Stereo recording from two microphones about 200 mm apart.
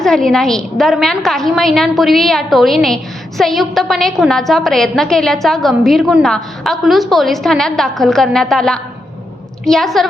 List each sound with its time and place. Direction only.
0.0 s a woman's voice: centre (ahead or behind)